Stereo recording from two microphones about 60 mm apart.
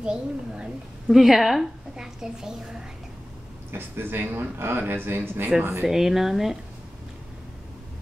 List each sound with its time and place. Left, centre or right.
0.0 s a woman's voice: centre
1.1 s a woman's voice: centre
3.7 s speech: right
5.9 s a woman's voice: centre